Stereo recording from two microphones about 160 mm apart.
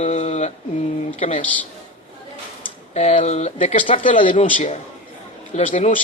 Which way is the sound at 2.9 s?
45° left (ahead or behind).